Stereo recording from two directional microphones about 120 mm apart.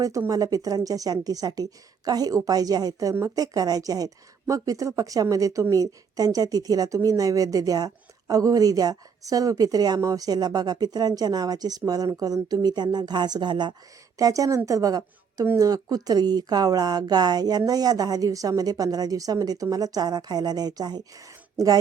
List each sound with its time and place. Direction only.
0.0 s a woman's voice: 30° right (ahead or behind)